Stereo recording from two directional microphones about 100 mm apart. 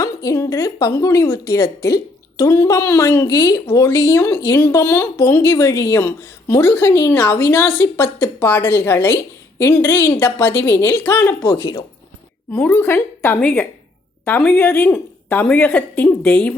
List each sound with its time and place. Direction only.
0.0 s a woman's voice: 35° left (ahead or behind)
12.5 s a woman's voice: 10° left (ahead or behind)
13.4 s a woman's voice: 10° left (ahead or behind)